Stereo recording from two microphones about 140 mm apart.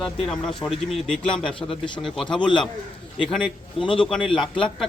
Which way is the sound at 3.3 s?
5° left (ahead or behind).